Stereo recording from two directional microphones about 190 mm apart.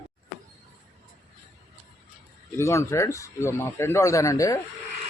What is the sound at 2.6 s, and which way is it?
A man's voice, 15° left (ahead or behind).